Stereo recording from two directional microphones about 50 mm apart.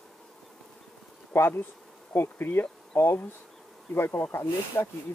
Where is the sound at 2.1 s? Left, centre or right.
Left.